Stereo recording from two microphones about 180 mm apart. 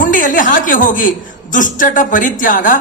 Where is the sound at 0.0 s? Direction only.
45° left (ahead or behind).